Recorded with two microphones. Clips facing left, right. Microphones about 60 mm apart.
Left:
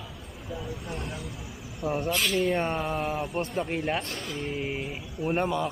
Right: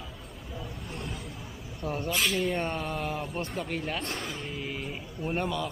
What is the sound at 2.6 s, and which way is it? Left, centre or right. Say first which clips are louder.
Speech: left 3 dB; left.